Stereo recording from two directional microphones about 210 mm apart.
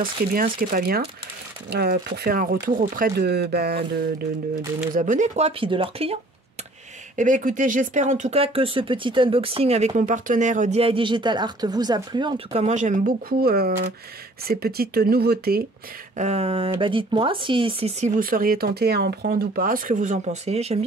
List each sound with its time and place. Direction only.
0.0 s speech: 45° right (ahead or behind)
4.9 s speech: 40° right (ahead or behind)
7.2 s speech: 40° right (ahead or behind); by 12.6 s 20° right (ahead or behind)
12.6 s speech: 35° right (ahead or behind)
16.2 s speech: 30° right (ahead or behind)